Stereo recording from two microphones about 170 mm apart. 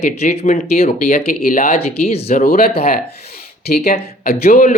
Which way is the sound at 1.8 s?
35° left (ahead or behind).